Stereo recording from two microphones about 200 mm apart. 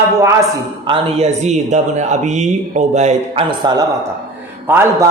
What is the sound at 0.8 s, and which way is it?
A man's voice, 30° right (ahead or behind).